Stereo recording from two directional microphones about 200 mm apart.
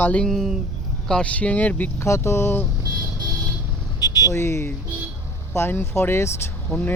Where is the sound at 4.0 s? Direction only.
20° left (ahead or behind).